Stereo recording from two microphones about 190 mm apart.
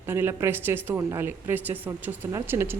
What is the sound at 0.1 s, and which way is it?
Speech, 10° right (ahead or behind).